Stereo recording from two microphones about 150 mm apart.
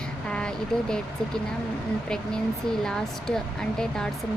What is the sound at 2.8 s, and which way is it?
Speech, 5° left (ahead or behind).